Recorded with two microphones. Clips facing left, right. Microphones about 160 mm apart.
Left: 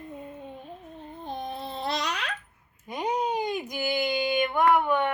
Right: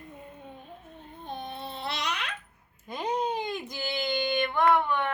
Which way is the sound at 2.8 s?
15° left (ahead or behind).